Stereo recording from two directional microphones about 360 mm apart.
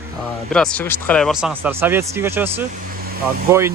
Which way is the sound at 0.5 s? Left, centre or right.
Centre.